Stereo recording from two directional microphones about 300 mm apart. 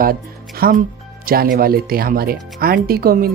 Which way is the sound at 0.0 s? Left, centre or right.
Right.